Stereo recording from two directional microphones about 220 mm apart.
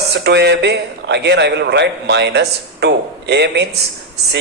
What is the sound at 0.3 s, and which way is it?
A man's voice, 50° right (ahead or behind).